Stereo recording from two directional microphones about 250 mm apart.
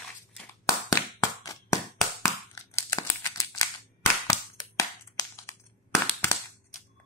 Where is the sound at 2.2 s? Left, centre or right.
Centre.